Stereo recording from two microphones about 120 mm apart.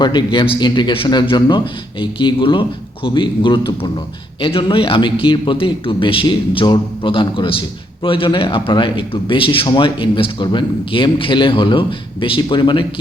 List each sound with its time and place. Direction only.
0.0 s a man's voice: 40° left (ahead or behind)